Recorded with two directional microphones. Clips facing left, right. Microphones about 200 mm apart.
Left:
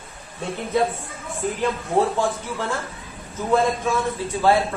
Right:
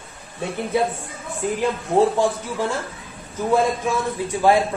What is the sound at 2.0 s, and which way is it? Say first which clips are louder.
A woman's voice: right 3 dB; 15° right (ahead or behind).